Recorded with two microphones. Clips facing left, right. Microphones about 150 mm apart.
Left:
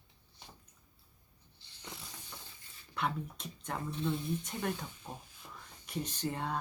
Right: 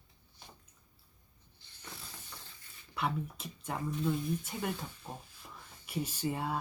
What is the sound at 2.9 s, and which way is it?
Speech, 5° right (ahead or behind).